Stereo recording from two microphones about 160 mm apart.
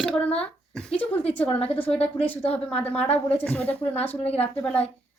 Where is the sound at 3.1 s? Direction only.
10° left (ahead or behind).